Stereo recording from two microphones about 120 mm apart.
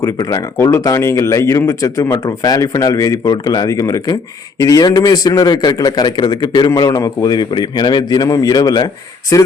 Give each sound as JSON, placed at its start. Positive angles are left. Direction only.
{"t": 0.0, "sound": "speech", "side_deg": 30}